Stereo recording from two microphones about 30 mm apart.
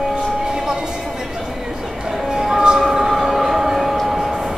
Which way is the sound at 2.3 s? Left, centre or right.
Centre.